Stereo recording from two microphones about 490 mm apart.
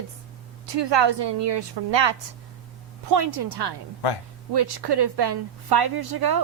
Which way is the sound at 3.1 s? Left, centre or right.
Right.